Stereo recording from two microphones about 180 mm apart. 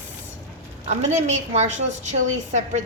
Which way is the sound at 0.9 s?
40° right (ahead or behind).